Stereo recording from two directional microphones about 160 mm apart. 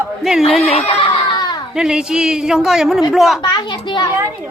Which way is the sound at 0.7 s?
35° left (ahead or behind).